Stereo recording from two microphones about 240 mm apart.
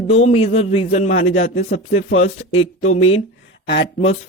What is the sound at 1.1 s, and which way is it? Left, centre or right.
Speech, left.